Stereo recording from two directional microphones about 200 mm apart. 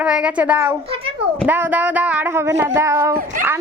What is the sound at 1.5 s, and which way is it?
Speech, 10° right (ahead or behind).